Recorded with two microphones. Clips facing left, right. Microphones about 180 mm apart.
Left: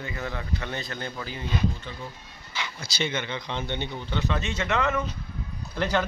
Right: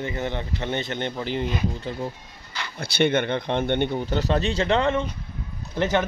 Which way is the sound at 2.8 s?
60° right (ahead or behind).